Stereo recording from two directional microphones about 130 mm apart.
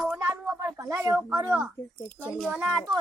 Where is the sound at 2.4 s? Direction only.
5° left (ahead or behind).